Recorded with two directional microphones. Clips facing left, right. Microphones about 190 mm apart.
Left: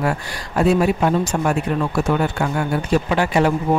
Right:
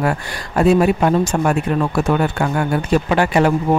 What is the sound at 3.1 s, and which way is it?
Speech, 60° right (ahead or behind).